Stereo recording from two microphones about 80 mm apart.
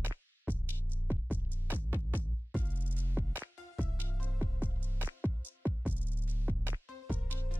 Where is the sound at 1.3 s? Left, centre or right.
Right.